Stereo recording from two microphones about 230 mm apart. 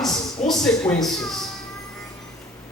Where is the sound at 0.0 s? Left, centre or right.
Centre.